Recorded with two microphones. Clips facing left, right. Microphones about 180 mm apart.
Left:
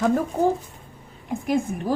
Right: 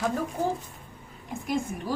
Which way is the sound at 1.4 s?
50° left (ahead or behind).